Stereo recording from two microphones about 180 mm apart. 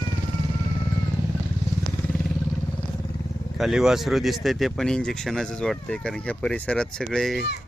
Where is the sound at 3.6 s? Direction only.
Centre (ahead or behind).